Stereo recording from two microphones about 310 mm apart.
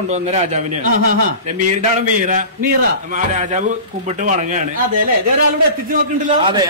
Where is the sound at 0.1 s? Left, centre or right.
Right.